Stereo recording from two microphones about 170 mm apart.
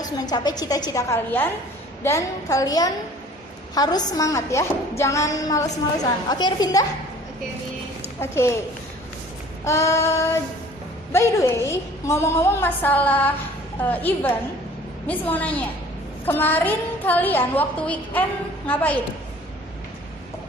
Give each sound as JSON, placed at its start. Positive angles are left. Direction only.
{"t": 0.0, "sound": "a woman's voice", "side_deg": 25}
{"t": 8.2, "sound": "a woman's voice", "side_deg": 15}
{"t": 9.6, "sound": "a woman's voice", "side_deg": 15}